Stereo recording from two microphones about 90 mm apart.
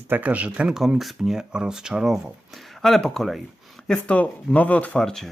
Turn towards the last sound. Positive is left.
turn(degrees=5)  # may be behind; listen again after turning